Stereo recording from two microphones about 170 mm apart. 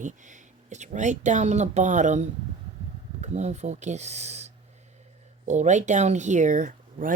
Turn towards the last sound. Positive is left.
turn(degrees=-50)  # may be behind; listen again after turning